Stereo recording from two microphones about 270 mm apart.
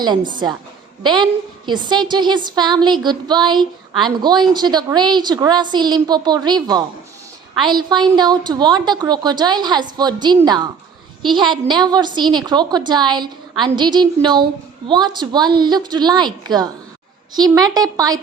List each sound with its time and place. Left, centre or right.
0.0 s a woman's voice: centre